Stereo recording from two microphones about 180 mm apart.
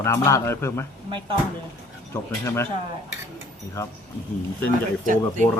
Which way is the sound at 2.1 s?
15° left (ahead or behind).